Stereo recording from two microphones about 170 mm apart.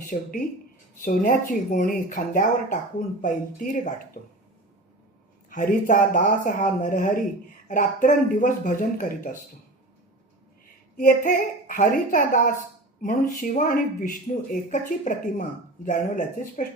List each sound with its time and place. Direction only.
0.0 s speech: 50° left (ahead or behind)
5.5 s speech: 50° left (ahead or behind)
10.9 s speech: 50° left (ahead or behind)